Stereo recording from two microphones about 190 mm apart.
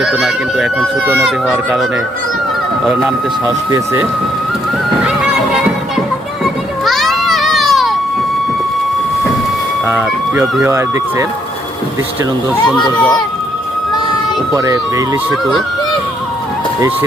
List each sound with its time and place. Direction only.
0.0 s speech: 5° right (ahead or behind)
2.8 s speech: 5° right (ahead or behind)
6.4 s children playing: centre (ahead or behind)
9.8 s speech: 10° right (ahead or behind)
12.7 s speech: 5° left (ahead or behind)
14.5 s speech: 20° right (ahead or behind)